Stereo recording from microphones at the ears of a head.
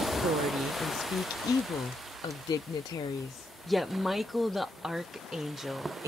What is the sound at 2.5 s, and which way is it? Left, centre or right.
Speech, left.